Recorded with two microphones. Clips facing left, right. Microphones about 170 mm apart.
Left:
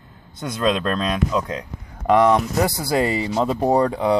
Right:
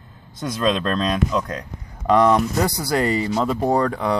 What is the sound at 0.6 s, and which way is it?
Speech, 10° left (ahead or behind).